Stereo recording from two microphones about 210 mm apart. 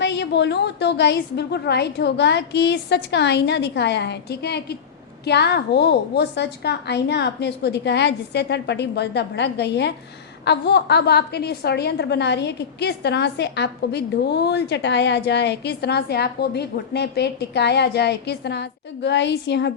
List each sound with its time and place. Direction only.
0.0 s a woman's voice: 55° left (ahead or behind)